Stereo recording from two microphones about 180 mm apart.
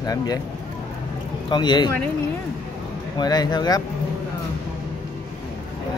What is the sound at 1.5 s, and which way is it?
Speech, 25° left (ahead or behind).